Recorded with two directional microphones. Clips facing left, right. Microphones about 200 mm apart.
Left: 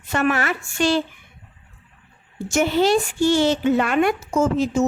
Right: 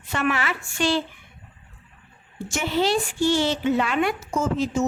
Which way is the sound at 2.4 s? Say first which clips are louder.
Left 5 dB; 45° left (ahead or behind).